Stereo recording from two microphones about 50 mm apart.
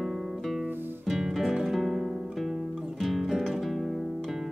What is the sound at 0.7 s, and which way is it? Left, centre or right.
Music, right.